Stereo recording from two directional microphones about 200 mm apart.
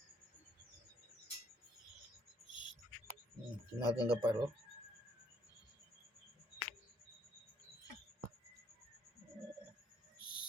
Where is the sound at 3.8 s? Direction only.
20° left (ahead or behind).